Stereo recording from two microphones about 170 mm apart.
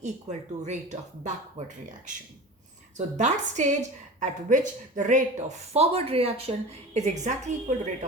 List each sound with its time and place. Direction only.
0.0 s speech: 45° right (ahead or behind)
3.2 s speech: 45° right (ahead or behind)